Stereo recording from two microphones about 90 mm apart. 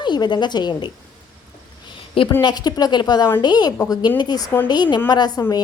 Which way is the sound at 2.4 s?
50° left (ahead or behind).